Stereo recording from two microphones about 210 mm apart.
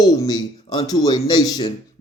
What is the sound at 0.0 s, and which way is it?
Speech, 20° left (ahead or behind).